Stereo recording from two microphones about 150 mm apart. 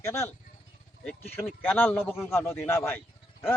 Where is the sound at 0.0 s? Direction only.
20° left (ahead or behind).